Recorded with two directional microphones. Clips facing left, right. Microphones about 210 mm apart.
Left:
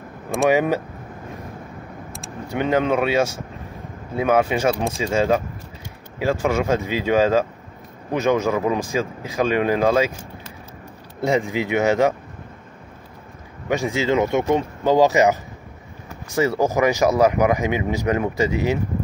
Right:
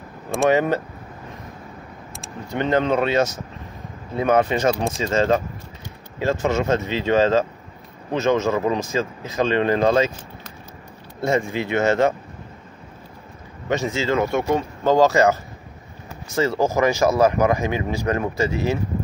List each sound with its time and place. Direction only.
0.5 s speech: 10° left (ahead or behind)
2.5 s speech: 10° left (ahead or behind)
11.1 s speech: 15° left (ahead or behind)
13.7 s speech: 15° left (ahead or behind)
16.3 s speech: 15° left (ahead or behind)